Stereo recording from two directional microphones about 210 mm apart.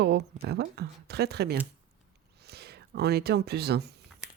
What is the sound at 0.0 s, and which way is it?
Speech, 50° right (ahead or behind).